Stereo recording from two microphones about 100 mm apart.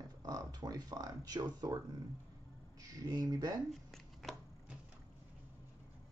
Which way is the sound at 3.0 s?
40° right (ahead or behind).